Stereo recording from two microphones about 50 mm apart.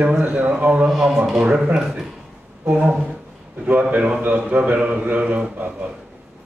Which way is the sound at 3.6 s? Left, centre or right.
Right.